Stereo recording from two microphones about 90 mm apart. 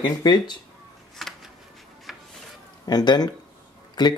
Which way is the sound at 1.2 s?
Centre (ahead or behind).